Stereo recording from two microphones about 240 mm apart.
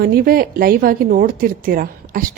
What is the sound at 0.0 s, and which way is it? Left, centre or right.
A woman's voice, right.